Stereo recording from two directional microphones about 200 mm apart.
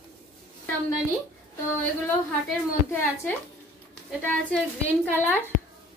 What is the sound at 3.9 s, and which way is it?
A woman's voice, 5° left (ahead or behind).